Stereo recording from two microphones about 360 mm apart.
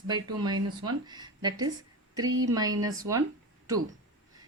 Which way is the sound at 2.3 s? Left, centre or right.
Right.